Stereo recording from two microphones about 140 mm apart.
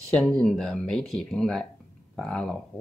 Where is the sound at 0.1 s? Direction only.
5° left (ahead or behind).